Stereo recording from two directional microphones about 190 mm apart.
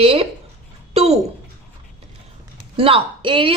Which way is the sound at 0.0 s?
30° right (ahead or behind).